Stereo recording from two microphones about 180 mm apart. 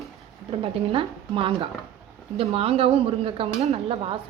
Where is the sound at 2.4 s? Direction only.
30° right (ahead or behind).